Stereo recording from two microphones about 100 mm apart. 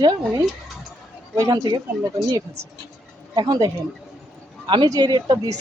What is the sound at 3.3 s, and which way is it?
Speech, 45° right (ahead or behind).